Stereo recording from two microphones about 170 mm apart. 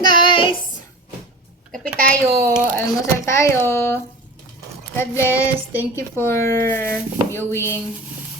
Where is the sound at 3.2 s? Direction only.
15° left (ahead or behind).